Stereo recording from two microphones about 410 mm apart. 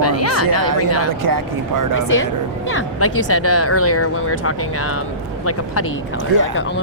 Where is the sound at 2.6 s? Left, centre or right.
Left.